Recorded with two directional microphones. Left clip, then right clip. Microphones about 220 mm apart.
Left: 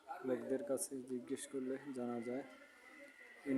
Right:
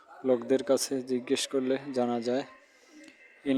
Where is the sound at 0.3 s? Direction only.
35° right (ahead or behind).